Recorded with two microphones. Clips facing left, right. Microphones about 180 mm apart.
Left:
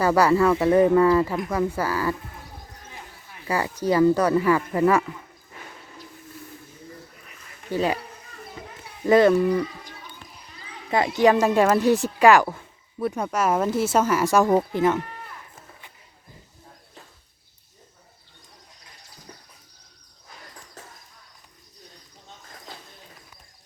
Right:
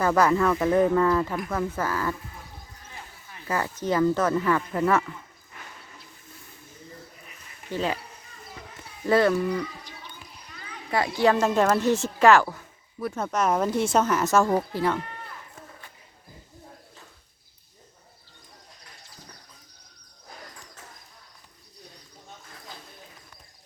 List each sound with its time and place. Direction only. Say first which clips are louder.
0.0 s speech: left 3 dB; 10° left (ahead or behind)
3.4 s speech: left 3 dB; 10° left (ahead or behind)
7.7 s speech: left 4 dB; 10° left (ahead or behind)
9.0 s speech: left 5 dB; 20° left (ahead or behind)
10.9 s speech: left 3 dB; 15° left (ahead or behind)
12.5 s a sound: left 4 dB; 25° left (ahead or behind)
13.1 s speech: left 1 dB; 10° left (ahead or behind)